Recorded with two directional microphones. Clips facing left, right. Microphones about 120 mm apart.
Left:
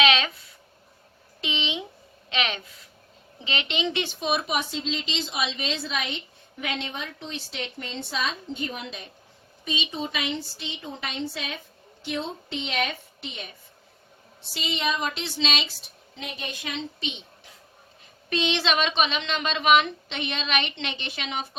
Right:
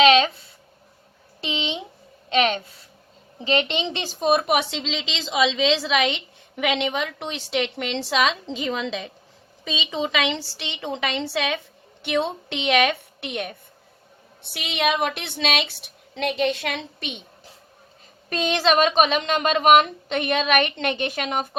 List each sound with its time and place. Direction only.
0.0 s a sound: 35° right (ahead or behind)
2.3 s a woman's voice: 35° right (ahead or behind); by 11.6 s 85° right
12.0 s a woman's voice: 70° right (ahead or behind); by 17.2 s 55° right (ahead or behind)
18.3 s a woman's voice: 45° right (ahead or behind)